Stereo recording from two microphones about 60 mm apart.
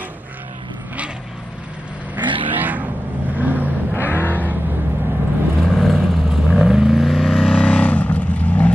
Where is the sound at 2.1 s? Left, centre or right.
Right.